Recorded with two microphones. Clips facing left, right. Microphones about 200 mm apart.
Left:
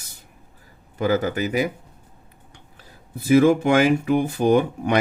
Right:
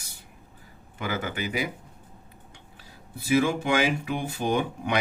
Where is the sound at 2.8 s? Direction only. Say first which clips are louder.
Left 6 dB; 50° left (ahead or behind).